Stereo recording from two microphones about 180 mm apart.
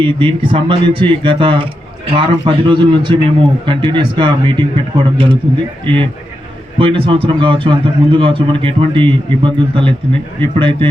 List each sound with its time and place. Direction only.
0.0 s a man's voice: 30° right (ahead or behind)